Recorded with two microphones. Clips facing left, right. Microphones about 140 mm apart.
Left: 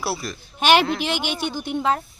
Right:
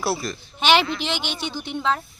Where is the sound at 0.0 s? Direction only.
5° left (ahead or behind).